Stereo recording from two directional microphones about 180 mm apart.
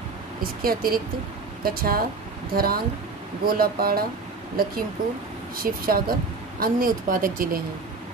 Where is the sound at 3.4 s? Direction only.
55° right (ahead or behind).